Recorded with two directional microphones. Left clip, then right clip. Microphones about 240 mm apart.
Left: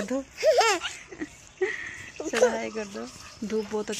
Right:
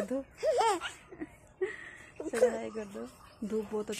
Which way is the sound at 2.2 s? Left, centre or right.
Centre.